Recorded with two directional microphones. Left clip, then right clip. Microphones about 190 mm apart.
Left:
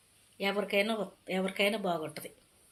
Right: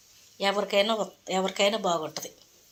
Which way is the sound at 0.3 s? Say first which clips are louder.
Right 6 dB; 10° left (ahead or behind).